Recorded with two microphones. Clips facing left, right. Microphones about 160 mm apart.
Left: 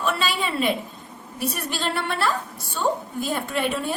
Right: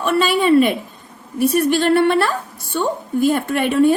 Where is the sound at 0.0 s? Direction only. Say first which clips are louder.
Right 9 dB; 60° right (ahead or behind).